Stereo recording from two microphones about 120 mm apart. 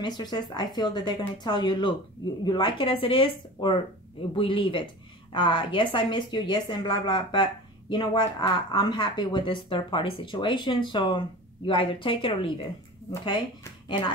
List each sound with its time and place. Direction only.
0.0 s a woman's voice: 35° left (ahead or behind)